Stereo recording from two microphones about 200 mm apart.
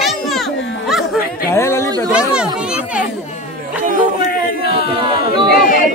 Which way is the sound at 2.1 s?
5° right (ahead or behind).